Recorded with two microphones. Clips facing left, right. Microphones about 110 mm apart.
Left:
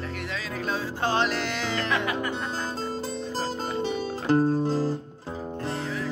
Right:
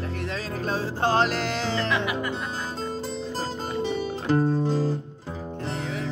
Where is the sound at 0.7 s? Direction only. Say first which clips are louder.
Right 3 dB; 40° right (ahead or behind).